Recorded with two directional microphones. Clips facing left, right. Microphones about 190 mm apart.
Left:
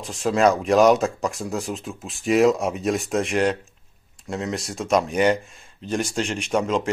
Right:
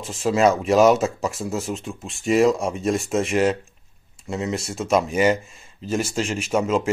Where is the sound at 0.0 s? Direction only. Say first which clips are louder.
Right 1 dB; centre (ahead or behind).